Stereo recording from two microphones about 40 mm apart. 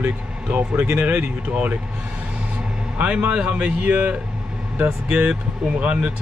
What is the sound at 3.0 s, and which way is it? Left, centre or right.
Speech, right.